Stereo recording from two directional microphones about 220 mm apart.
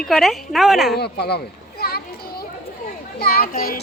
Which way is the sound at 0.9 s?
45° left (ahead or behind).